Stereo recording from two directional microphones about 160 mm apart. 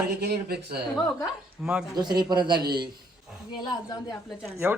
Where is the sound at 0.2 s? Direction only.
80° right.